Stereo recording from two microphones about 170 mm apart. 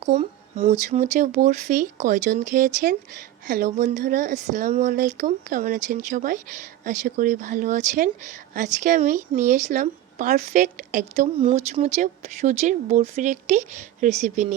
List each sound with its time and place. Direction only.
0.0 s speech: 45° right (ahead or behind)
11.3 s speech: 30° right (ahead or behind)
11.7 s speech: 45° right (ahead or behind)